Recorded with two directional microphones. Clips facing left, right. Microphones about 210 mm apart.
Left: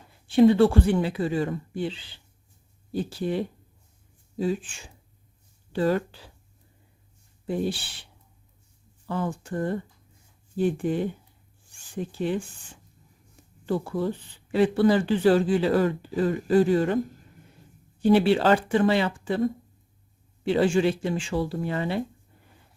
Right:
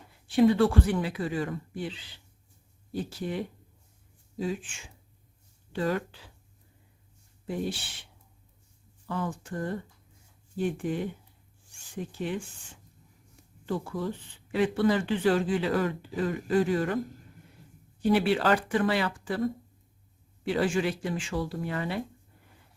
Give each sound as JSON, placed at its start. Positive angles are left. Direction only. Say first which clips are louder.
{"t": 0.3, "sound": "speech", "louder": "left 4 dB", "side_deg": 25}
{"t": 7.4, "sound": "speech", "louder": "left 5 dB", "side_deg": 30}
{"t": 9.0, "sound": "speech", "louder": "left 4 dB", "side_deg": 30}
{"t": 13.7, "sound": "speech", "louder": "left 5 dB", "side_deg": 35}
{"t": 18.0, "sound": "speech", "louder": "left 5 dB", "side_deg": 25}